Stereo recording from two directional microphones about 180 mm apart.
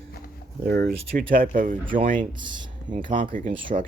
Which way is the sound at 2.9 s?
45° right (ahead or behind).